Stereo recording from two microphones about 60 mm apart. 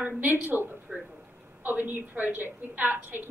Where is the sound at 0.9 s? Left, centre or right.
Centre.